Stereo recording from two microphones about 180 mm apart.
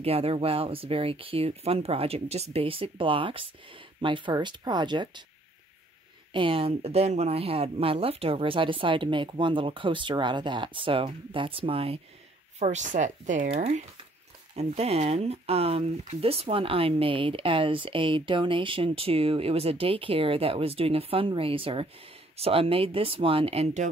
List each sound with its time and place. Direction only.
0.0 s speech: 35° right (ahead or behind)
6.3 s speech: 30° right (ahead or behind)